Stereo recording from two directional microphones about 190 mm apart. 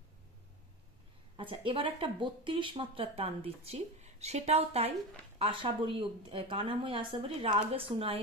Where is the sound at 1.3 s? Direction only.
30° right (ahead or behind).